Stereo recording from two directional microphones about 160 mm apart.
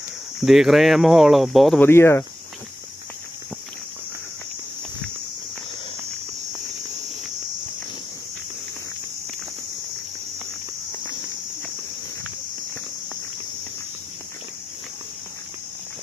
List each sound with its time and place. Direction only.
0.4 s speech: centre (ahead or behind)
1.8 s speech: 15° left (ahead or behind)